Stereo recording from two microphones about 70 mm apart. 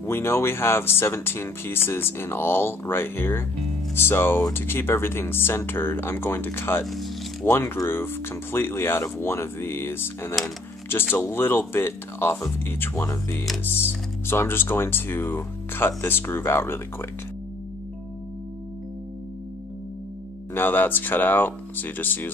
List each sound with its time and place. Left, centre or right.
0.0 s speech: left
20.5 s speech: left